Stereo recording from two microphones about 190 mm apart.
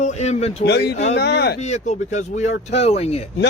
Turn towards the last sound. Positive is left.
turn(degrees=35)  # may be behind; listen again after turning